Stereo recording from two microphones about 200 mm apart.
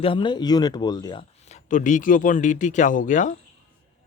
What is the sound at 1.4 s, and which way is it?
A man's voice, 35° left (ahead or behind).